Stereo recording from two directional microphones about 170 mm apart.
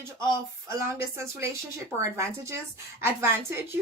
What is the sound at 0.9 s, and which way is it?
A woman's voice, 15° right (ahead or behind).